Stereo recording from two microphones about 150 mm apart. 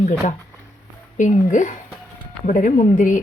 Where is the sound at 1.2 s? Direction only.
55° left (ahead or behind).